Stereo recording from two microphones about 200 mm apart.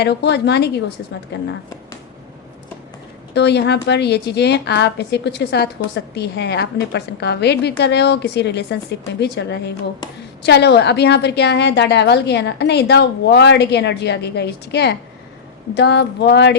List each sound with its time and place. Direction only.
0.0 s a woman's voice: 55° left (ahead or behind)
3.3 s a woman's voice: 55° left (ahead or behind)